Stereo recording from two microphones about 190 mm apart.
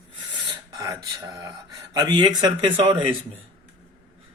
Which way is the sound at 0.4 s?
20° right (ahead or behind).